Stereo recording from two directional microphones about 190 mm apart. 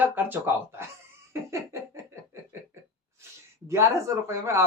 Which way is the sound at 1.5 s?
15° right (ahead or behind).